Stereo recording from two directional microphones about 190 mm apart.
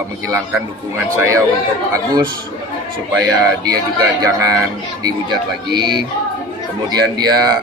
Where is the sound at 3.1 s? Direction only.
20° right (ahead or behind).